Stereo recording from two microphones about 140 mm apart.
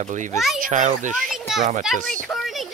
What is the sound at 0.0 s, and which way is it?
A child's voice, 65° right (ahead or behind).